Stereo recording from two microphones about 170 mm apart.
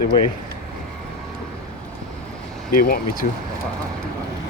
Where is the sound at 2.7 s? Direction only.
60° left (ahead or behind).